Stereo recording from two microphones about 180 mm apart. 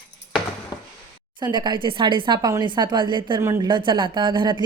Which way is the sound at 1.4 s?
25° right (ahead or behind).